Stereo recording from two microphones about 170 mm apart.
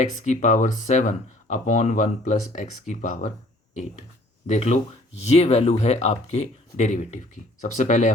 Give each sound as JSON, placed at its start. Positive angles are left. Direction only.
{"t": 0.0, "sound": "speech", "side_deg": 45}
{"t": 4.4, "sound": "speech", "side_deg": 40}